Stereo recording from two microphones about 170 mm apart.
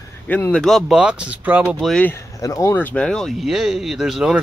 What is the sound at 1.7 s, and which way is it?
Speech, 5° left (ahead or behind).